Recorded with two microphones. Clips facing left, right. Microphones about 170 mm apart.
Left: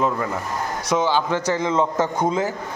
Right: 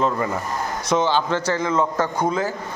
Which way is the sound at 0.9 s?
10° left (ahead or behind).